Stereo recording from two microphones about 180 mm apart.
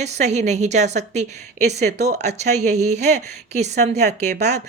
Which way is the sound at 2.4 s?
40° right (ahead or behind).